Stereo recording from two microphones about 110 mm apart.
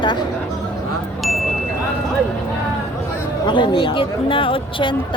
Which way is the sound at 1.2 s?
Centre (ahead or behind).